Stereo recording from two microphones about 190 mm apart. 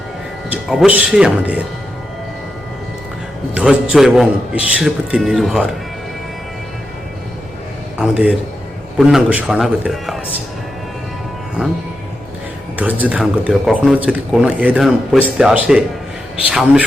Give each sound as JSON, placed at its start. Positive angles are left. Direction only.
{"t": 0.5, "sound": "speech", "side_deg": -5}
{"t": 3.5, "sound": "speech", "side_deg": -5}
{"t": 7.9, "sound": "speech", "side_deg": -5}
{"t": 12.7, "sound": "speech", "side_deg": -10}